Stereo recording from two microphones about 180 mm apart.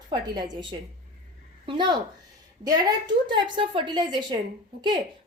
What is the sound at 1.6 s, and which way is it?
Speech, 25° right (ahead or behind).